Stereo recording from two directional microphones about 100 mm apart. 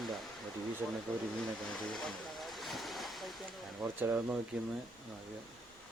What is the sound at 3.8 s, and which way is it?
Speech, 15° right (ahead or behind).